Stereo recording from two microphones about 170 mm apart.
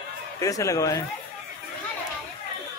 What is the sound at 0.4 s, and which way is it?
Speech, 20° left (ahead or behind).